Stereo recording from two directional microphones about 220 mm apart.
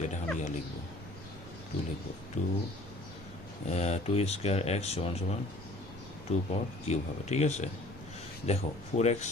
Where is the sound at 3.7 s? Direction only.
30° left (ahead or behind).